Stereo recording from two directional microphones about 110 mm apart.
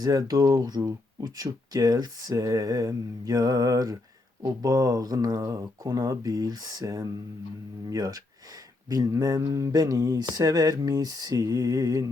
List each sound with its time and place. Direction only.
0.0 s speech: 35° right (ahead or behind)